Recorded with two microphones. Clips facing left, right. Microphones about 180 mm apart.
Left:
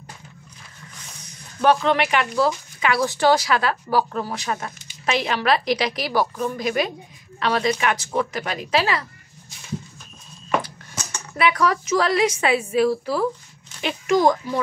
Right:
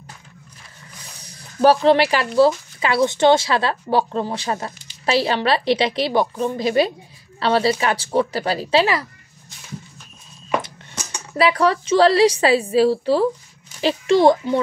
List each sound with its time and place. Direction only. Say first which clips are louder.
1.2 s a woman's voice: right 4 dB; 35° right (ahead or behind)
10.6 s music: even; 15° right (ahead or behind)
11.3 s a woman's voice: right 3 dB; 30° right (ahead or behind)